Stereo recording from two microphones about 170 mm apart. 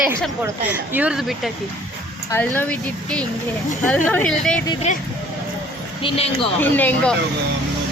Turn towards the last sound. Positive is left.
turn(degrees=10)  # may be behind; listen again after turning